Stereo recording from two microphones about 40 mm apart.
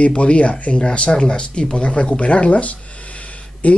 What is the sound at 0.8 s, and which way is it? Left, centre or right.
Speech, left.